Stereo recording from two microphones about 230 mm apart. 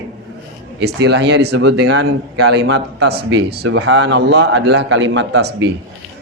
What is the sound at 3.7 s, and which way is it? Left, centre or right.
A man's voice, right.